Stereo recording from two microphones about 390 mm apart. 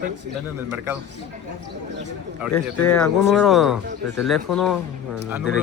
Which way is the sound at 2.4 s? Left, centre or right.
Centre.